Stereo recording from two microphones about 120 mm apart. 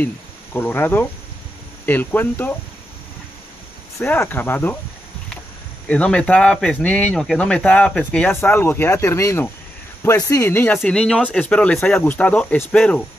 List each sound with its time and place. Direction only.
0.0 s speech: 15° left (ahead or behind)
4.0 s speech: 15° left (ahead or behind)
5.9 s speech: 10° left (ahead or behind)
10.8 s speech: 5° left (ahead or behind)